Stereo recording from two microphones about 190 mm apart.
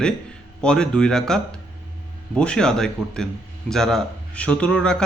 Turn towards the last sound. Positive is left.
turn(degrees=5)  # may be behind; listen again after turning